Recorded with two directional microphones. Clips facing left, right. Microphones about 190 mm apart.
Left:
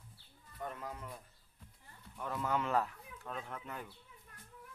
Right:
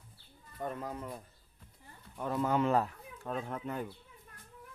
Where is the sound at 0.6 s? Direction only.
35° right (ahead or behind).